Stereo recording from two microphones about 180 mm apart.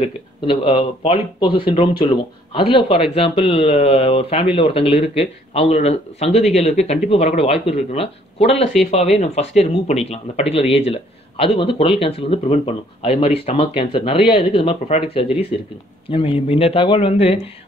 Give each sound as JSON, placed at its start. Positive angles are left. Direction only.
{"t": 0.0, "sound": "speech", "side_deg": 30}